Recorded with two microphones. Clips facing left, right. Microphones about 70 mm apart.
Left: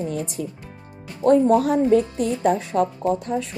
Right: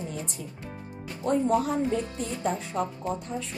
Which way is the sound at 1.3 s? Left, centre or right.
Left.